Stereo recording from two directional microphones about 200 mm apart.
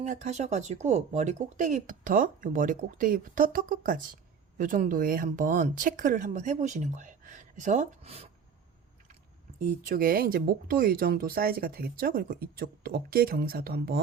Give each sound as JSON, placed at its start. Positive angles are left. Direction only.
{"t": 0.0, "sound": "speech", "side_deg": -35}
{"t": 9.6, "sound": "speech", "side_deg": -45}